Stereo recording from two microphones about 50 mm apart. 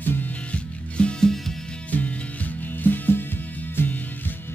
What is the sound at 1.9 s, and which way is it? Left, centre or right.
Music, left.